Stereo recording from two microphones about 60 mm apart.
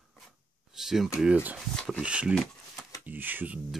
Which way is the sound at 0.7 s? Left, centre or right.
Centre.